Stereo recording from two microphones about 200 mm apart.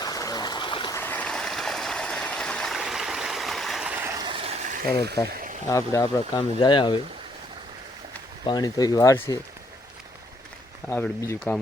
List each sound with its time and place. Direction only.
0.0 s a sound: 20° left (ahead or behind)
0.9 s stream: 10° left (ahead or behind); by 4.8 s 35° right (ahead or behind)
5.3 s a sound: 45° right (ahead or behind)
5.6 s speech: 15° left (ahead or behind)
8.4 s speech: 20° left (ahead or behind)
10.8 s speech: 10° left (ahead or behind)